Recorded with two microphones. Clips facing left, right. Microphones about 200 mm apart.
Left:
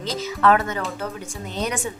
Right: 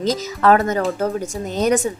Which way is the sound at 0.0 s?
40° right (ahead or behind).